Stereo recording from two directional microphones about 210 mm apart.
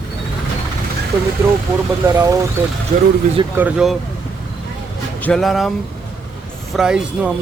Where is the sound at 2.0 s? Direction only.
15° right (ahead or behind).